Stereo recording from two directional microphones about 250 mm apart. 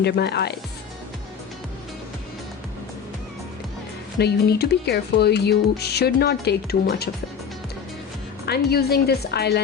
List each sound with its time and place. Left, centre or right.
0.0 s speech: left
4.2 s speech: left
8.4 s speech: left